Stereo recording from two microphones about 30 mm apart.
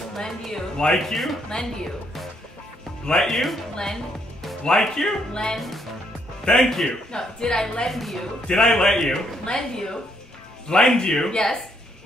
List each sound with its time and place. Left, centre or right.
0.2 s a woman's voice: left
0.9 s speech: centre
1.5 s a woman's voice: left
3.2 s speech: centre
3.9 s music: centre
4.7 s speech: centre
5.3 s a woman's voice: left
6.5 s speech: centre
7.1 s a woman's voice: left
7.9 s speech: centre
8.5 s speech: centre
9.4 s a woman's voice: left